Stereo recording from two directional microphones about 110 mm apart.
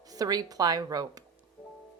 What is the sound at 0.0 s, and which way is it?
Speech, 35° right (ahead or behind).